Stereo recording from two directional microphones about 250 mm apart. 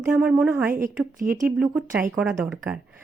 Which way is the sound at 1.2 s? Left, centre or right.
Right.